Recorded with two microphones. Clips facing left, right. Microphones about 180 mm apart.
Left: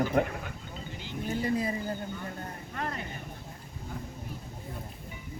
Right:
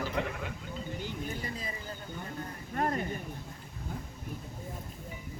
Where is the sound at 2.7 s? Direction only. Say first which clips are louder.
Right 5 dB; 45° right (ahead or behind).